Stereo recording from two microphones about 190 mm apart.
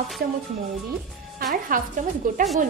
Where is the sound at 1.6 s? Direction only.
45° right (ahead or behind).